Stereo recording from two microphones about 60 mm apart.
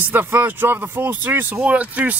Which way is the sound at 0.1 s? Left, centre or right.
Right.